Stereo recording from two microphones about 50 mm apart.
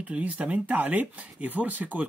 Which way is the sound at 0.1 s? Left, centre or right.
Right.